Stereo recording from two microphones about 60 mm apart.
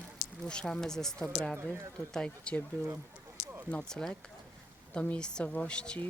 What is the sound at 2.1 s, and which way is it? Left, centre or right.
Speech, centre.